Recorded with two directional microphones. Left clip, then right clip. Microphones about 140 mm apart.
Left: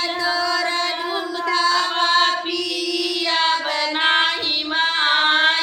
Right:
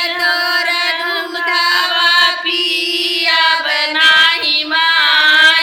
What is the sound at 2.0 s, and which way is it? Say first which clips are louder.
Female singing: right 6 dB; 25° left (ahead or behind).